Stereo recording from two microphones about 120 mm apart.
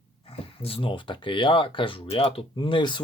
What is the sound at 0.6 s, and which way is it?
Speech, 50° left (ahead or behind).